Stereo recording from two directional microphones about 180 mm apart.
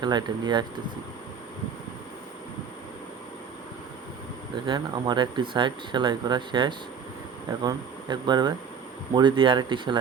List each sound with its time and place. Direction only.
0.0 s speech: 25° right (ahead or behind)
4.5 s speech: 25° right (ahead or behind)